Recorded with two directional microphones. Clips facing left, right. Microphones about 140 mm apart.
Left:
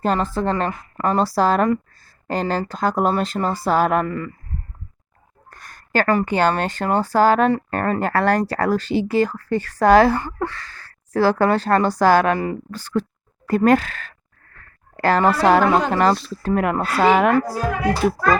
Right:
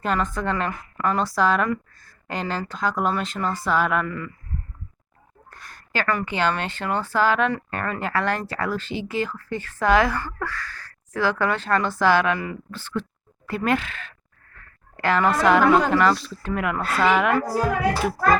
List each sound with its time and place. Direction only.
0.0 s speech: 35° left (ahead or behind)
5.5 s a sound: 45° left (ahead or behind)
6.1 s speech: 40° left (ahead or behind)